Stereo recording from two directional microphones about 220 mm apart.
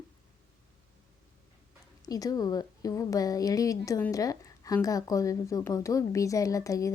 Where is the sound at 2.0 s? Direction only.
15° left (ahead or behind).